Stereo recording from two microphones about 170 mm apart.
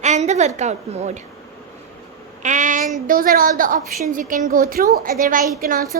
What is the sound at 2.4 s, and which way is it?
A woman's voice, 45° right (ahead or behind).